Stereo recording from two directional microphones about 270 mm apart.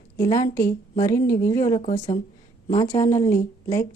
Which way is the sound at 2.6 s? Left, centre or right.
Left.